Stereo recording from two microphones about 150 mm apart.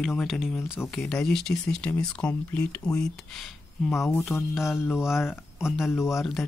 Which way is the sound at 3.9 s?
20° left (ahead or behind).